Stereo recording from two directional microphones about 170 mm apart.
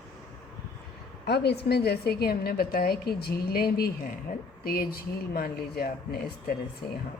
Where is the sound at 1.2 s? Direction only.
75° left (ahead or behind).